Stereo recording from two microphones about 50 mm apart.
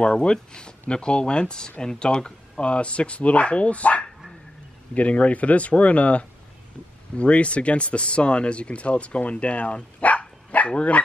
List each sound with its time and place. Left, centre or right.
0.0 s speech: centre